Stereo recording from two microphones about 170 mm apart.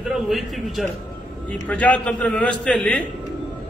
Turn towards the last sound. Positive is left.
turn(degrees=5)  # may be behind; listen again after turning